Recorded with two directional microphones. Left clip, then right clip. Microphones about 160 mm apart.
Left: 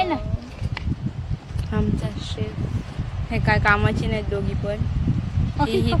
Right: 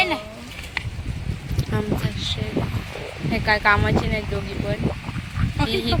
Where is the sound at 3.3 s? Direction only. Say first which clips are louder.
Right 1 dB; 10° left (ahead or behind).